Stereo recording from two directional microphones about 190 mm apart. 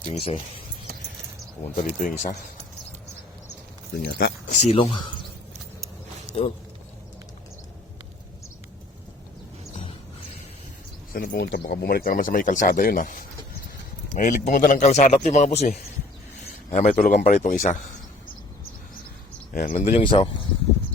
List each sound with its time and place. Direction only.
0.1 s a man's voice: 30° left (ahead or behind)
1.7 s speech: 45° left (ahead or behind)
4.0 s speech: 55° left (ahead or behind)
4.5 s a man's voice: 35° left (ahead or behind)
6.3 s a man's voice: 30° left (ahead or behind)
11.1 s speech: 50° left (ahead or behind)
14.2 s a man's voice: 40° left (ahead or behind)
16.7 s a man's voice: 40° left (ahead or behind)
19.5 s a man's voice: 45° left (ahead or behind); by 20.4 s 25° left (ahead or behind)